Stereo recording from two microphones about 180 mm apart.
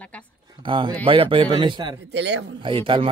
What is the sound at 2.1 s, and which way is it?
Speech, 75° right (ahead or behind).